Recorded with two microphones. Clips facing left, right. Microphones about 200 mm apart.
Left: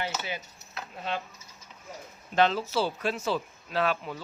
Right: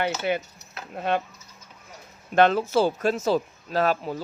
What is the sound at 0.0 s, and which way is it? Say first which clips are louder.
Speech: right 9 dB; 60° right (ahead or behind).